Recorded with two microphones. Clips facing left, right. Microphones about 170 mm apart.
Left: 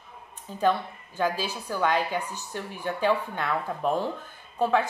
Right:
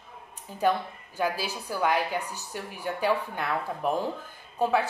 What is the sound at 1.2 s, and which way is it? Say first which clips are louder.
A woman's voice: left 2 dB; 10° right (ahead or behind).